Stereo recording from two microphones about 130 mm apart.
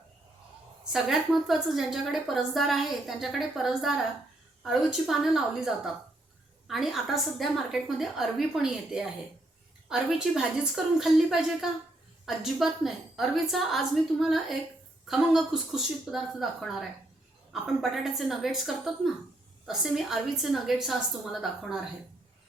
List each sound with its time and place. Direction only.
0.9 s a woman's voice: centre (ahead or behind)